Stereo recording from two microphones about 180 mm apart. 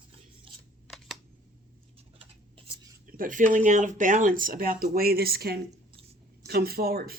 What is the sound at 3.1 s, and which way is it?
Speech, 50° right (ahead or behind).